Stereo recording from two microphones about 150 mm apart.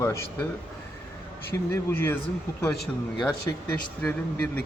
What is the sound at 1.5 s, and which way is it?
Speech, 15° left (ahead or behind).